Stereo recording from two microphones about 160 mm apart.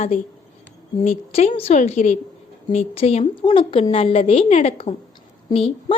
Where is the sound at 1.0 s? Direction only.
40° left (ahead or behind).